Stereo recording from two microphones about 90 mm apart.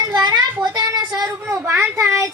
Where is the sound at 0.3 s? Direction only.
50° right (ahead or behind).